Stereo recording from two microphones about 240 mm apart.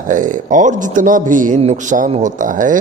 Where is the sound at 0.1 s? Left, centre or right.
Right.